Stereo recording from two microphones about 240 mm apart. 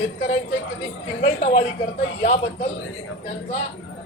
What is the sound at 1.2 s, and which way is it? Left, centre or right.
A man's voice, left.